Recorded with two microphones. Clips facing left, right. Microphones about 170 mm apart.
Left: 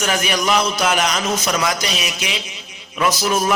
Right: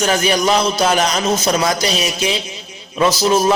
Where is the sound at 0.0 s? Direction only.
30° right (ahead or behind).